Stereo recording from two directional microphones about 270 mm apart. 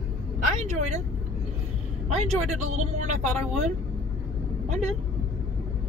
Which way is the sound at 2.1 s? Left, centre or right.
Right.